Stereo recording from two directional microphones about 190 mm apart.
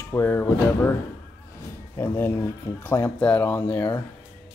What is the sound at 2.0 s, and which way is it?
Speech, 10° left (ahead or behind).